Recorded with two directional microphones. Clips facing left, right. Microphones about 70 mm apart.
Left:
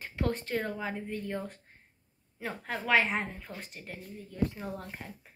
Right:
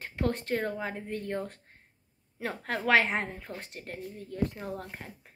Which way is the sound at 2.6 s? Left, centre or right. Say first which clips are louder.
Right 2 dB; right.